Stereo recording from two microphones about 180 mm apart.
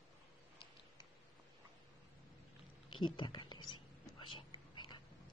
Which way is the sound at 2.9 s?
25° left (ahead or behind).